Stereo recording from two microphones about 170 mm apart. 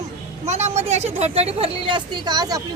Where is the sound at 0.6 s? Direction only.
40° right (ahead or behind).